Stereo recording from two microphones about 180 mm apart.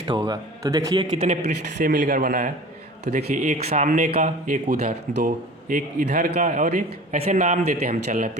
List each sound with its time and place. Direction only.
0.1 s a man's voice: 20° right (ahead or behind)
1.5 s a man's voice: 45° right (ahead or behind)